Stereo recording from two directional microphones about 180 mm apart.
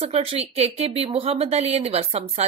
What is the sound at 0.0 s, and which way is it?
Speech, 35° right (ahead or behind).